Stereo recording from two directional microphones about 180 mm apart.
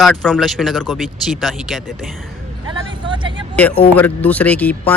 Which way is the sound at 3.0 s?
25° right (ahead or behind).